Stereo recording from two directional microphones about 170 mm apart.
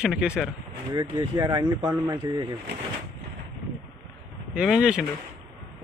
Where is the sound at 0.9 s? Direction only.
20° right (ahead or behind).